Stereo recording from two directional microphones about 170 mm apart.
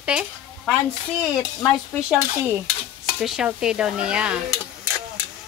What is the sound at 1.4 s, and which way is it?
Speech, 15° left (ahead or behind).